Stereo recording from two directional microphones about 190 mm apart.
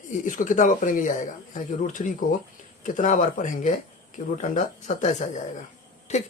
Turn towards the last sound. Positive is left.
turn(degrees=40)  # may be behind; listen again after turning